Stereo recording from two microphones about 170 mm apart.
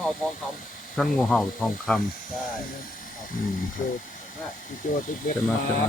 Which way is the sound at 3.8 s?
45° left (ahead or behind).